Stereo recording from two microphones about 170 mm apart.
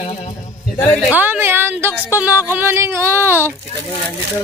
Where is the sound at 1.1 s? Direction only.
10° right (ahead or behind).